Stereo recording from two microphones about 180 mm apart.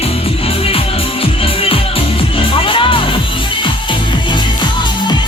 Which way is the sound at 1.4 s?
30° left (ahead or behind).